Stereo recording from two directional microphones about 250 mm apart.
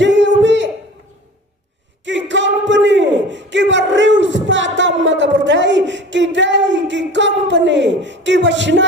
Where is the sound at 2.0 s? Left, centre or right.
Right.